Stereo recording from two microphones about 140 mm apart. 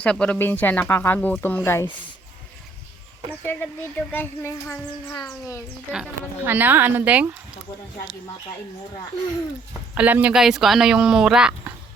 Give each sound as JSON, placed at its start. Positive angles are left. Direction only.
{"t": 0.0, "sound": "speech", "side_deg": 10}
{"t": 3.4, "sound": "speech", "side_deg": 15}
{"t": 5.9, "sound": "speech", "side_deg": -10}
{"t": 9.9, "sound": "speech", "side_deg": -10}